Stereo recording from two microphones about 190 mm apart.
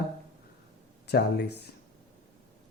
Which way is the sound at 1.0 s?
60° left (ahead or behind).